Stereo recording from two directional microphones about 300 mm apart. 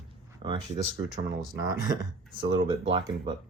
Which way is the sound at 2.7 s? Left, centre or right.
Centre.